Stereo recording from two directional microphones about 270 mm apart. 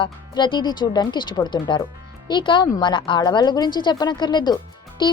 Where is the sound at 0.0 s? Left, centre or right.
Centre.